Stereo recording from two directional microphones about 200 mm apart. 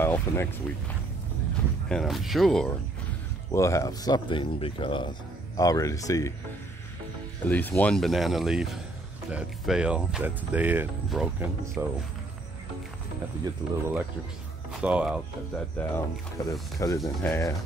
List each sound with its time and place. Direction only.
0.0 s speech: 10° left (ahead or behind)
1.9 s speech: centre (ahead or behind)
3.5 s speech: 15° left (ahead or behind)
7.4 s speech: 10° left (ahead or behind); by 11.9 s 15° right (ahead or behind)
13.4 s speech: 10° right (ahead or behind)
15.8 s speech: 5° left (ahead or behind)